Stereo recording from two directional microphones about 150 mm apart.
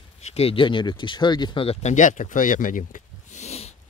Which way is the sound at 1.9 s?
55° left (ahead or behind).